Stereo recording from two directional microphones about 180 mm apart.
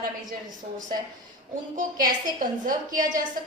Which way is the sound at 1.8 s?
45° right (ahead or behind).